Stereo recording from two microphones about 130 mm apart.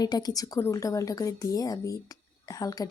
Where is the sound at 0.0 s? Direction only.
30° left (ahead or behind).